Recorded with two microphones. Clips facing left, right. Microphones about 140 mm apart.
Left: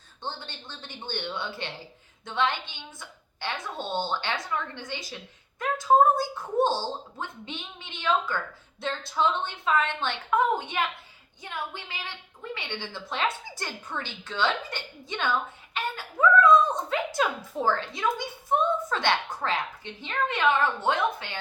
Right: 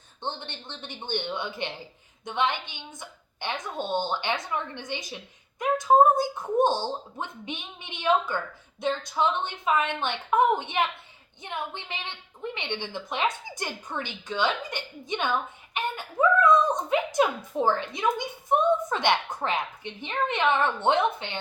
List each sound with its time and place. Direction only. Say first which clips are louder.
0.2 s a woman's voice: right 2 dB; 20° right (ahead or behind)